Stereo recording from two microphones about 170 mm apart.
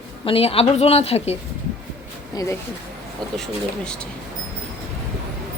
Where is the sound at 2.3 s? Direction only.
20° left (ahead or behind).